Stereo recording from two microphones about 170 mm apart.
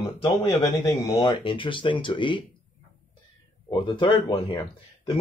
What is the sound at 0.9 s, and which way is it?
Speech, 20° left (ahead or behind).